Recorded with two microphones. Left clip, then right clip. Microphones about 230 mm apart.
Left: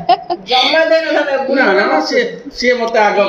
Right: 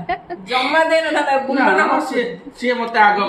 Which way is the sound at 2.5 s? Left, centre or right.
Centre.